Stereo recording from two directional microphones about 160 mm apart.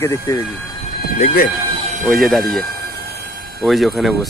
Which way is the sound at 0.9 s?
75° left (ahead or behind).